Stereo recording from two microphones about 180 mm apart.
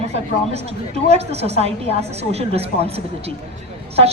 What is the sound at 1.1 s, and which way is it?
Speech, 35° right (ahead or behind).